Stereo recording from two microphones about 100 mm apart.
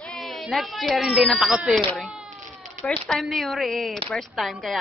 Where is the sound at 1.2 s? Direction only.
Centre (ahead or behind).